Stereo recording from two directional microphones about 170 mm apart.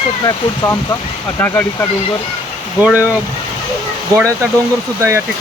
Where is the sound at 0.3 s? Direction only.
20° left (ahead or behind).